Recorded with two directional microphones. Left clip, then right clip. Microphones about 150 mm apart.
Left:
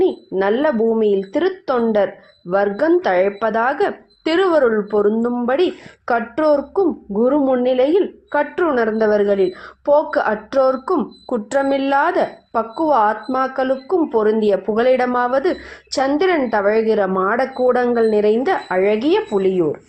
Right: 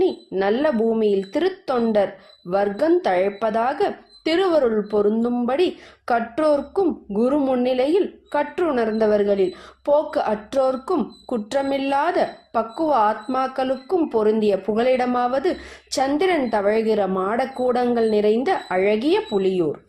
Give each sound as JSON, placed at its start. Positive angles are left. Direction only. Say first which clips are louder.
{"t": 0.0, "sound": "a woman's voice", "louder": "left 3 dB", "side_deg": 5}